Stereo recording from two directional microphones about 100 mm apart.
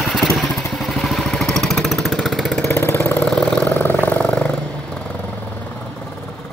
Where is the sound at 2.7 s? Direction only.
25° left (ahead or behind).